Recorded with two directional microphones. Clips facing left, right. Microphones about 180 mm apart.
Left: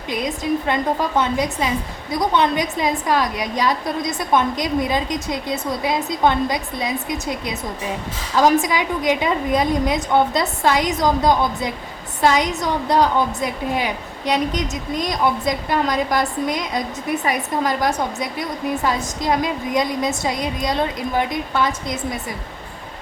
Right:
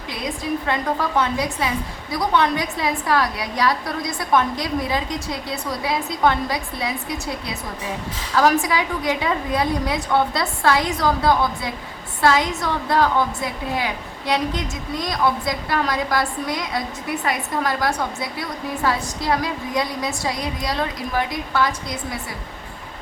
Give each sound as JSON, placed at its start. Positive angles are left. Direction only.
{"t": 0.1, "sound": "a woman's voice", "side_deg": 20}